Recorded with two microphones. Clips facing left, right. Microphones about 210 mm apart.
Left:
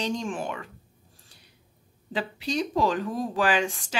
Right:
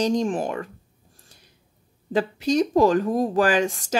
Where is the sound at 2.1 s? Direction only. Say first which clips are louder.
Right 8 dB; 45° right (ahead or behind).